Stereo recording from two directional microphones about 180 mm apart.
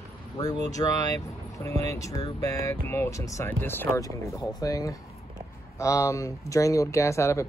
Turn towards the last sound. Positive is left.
turn(degrees=15)  # may be behind; listen again after turning